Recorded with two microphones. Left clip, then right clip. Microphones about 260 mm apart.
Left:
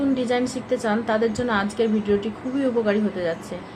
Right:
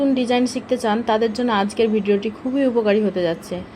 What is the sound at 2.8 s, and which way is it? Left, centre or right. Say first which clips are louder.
Speech: right 5 dB; right.